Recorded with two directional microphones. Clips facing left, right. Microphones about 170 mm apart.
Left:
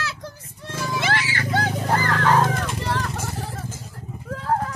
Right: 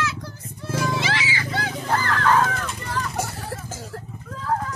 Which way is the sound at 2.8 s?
80° left.